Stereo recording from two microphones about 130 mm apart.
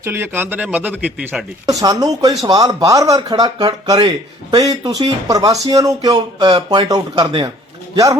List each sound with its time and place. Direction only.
0.0 s speech: 20° right (ahead or behind)
1.6 s speech: 30° right (ahead or behind)